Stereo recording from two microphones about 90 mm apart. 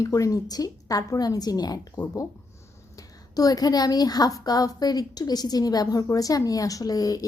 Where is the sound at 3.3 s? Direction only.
45° left (ahead or behind).